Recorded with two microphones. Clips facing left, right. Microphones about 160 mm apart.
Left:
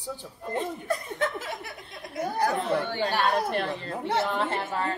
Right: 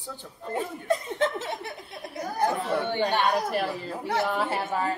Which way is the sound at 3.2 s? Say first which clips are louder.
Even; 5° right (ahead or behind).